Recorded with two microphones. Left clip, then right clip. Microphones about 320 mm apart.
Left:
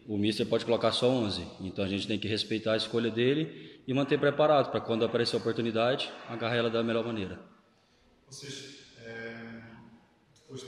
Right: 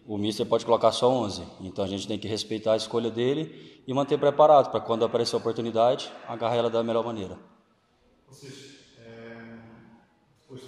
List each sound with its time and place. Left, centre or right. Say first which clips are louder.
0.2 s a man's voice: right 3 dB; centre